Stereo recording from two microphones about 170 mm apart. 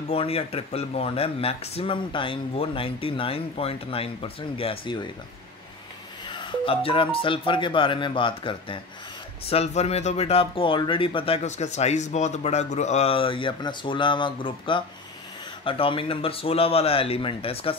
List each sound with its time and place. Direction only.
0.1 s speech: 35° left (ahead or behind)
6.2 s speech: 25° left (ahead or behind)